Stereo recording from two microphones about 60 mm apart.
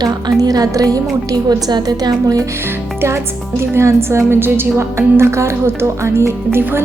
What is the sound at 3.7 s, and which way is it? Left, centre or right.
A woman's voice, right.